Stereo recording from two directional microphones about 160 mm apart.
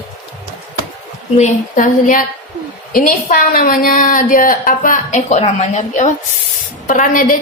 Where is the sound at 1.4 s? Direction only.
55° left (ahead or behind).